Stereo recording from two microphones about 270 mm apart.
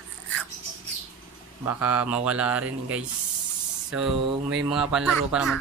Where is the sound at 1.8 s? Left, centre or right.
Centre.